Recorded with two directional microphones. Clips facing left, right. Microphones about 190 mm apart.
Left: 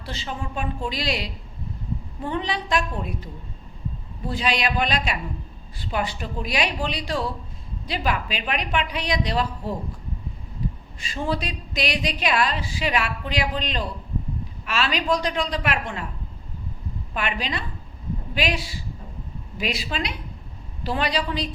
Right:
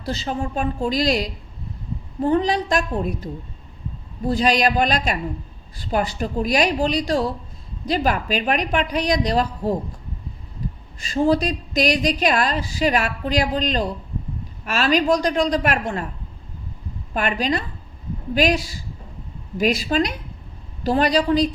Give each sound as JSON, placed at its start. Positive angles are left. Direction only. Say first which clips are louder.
{"t": 0.0, "sound": "a woman's voice", "louder": "right 7 dB", "side_deg": -40}
{"t": 4.3, "sound": "a woman's voice", "louder": "right 6 dB", "side_deg": -40}
{"t": 10.6, "sound": "a sound", "louder": "left 1 dB", "side_deg": -45}
{"t": 11.0, "sound": "a woman's voice", "louder": "right 9 dB", "side_deg": -40}
{"t": 17.2, "sound": "a woman's voice", "louder": "right 6 dB", "side_deg": -45}